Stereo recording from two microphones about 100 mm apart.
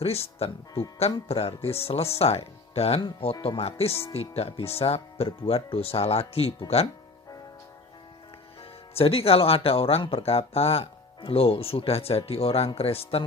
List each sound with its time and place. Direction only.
0.0 s speech: 90° left
3.0 s speech: 65° left (ahead or behind); by 6.5 s 90° left
9.0 s speech: 75° left (ahead or behind)